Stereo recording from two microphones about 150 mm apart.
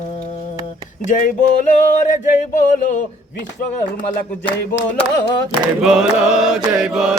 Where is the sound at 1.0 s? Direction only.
60° left (ahead or behind).